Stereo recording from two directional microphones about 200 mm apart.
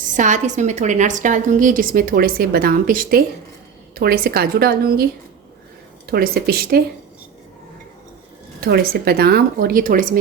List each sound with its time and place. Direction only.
0.1 s a woman's voice: 40° right (ahead or behind)
6.1 s a woman's voice: 50° right (ahead or behind)
8.6 s a woman's voice: 50° right (ahead or behind)